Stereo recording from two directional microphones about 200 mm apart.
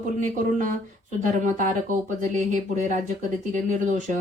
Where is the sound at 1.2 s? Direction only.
40° right (ahead or behind).